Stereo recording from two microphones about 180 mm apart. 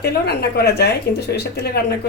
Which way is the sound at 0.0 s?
60° left (ahead or behind).